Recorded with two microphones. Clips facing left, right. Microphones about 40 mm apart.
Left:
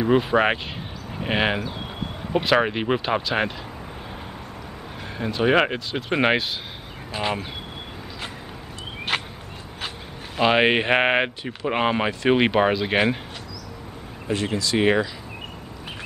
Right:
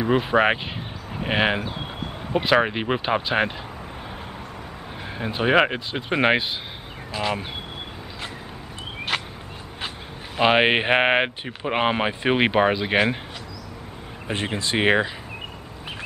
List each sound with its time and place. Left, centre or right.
0.0 s speech: centre
3.2 s speech: centre
5.1 s speech: centre
7.1 s speech: centre
9.1 s a sound: centre
10.4 s speech: centre
12.3 s speech: centre
14.2 s speech: right